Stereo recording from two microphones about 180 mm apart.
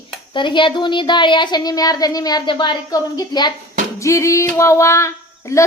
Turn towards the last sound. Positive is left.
turn(degrees=15)  # may be behind; listen again after turning